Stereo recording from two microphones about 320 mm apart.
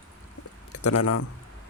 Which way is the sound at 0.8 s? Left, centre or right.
Left.